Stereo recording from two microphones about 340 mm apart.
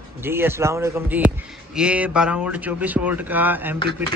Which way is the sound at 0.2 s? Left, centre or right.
Centre.